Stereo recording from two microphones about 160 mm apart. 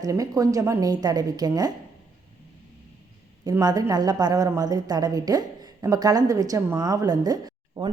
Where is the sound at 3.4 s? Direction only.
25° right (ahead or behind).